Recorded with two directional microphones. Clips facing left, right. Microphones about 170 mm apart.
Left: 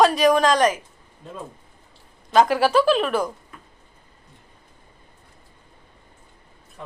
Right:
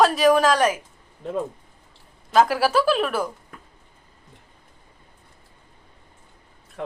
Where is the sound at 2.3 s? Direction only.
5° right (ahead or behind).